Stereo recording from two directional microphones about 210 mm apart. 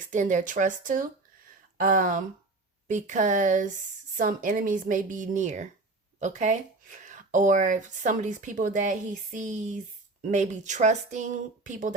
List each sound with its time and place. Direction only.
0.1 s speech: 35° right (ahead or behind)